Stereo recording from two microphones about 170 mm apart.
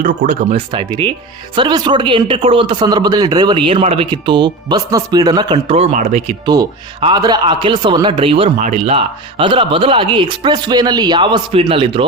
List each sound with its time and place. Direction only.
0.0 s speech: 45° right (ahead or behind)
0.5 s speech: 30° right (ahead or behind)
6.4 s speech: 25° right (ahead or behind)
8.5 s speech: 45° right (ahead or behind)